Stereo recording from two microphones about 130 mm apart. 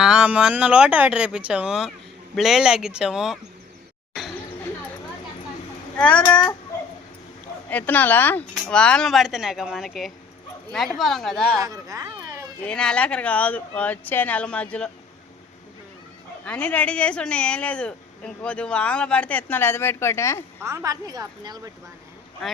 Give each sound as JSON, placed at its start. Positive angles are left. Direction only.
{"t": 0.0, "sound": "speech", "side_deg": -5}
{"t": 4.1, "sound": "chatter", "side_deg": -5}
{"t": 6.0, "sound": "speech", "side_deg": 10}
{"t": 7.7, "sound": "speech", "side_deg": 10}
{"t": 11.6, "sound": "a sound", "side_deg": -25}
{"t": 12.6, "sound": "speech", "side_deg": 5}
{"t": 16.5, "sound": "speech", "side_deg": 10}
{"t": 20.6, "sound": "a woman's voice", "side_deg": -20}